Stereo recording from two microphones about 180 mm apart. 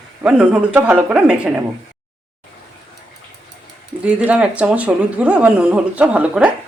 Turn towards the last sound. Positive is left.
turn(degrees=-5)  # may be behind; listen again after turning